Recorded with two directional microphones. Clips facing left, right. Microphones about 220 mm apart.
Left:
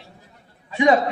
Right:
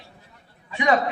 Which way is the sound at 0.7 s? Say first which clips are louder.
Left 4 dB; 25° left (ahead or behind).